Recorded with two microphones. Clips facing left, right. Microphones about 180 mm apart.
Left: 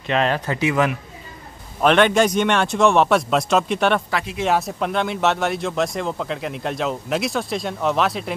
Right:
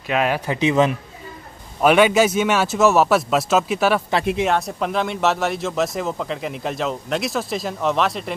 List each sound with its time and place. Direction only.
0.0 s a man's voice: 5° right (ahead or behind)
1.8 s speech: 5° right (ahead or behind)